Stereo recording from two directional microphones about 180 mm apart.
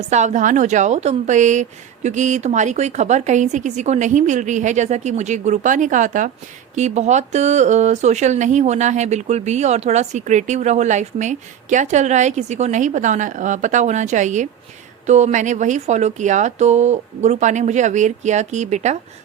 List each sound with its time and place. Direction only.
0.0 s speech: 40° right (ahead or behind)